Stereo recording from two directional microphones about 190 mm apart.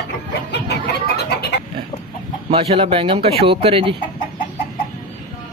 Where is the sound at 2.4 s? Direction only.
30° right (ahead or behind).